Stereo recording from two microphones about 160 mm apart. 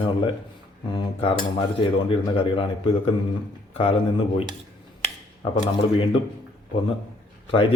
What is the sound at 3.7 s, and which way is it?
Speech, 35° left (ahead or behind).